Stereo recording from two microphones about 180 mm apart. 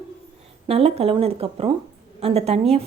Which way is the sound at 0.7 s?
35° right (ahead or behind).